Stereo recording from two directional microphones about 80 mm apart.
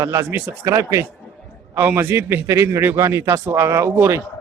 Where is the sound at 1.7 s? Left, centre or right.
Right.